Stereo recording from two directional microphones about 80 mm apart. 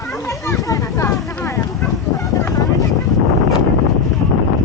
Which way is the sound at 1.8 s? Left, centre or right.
Left.